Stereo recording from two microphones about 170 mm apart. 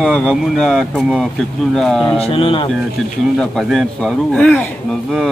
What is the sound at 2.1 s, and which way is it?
Speech, 35° left (ahead or behind).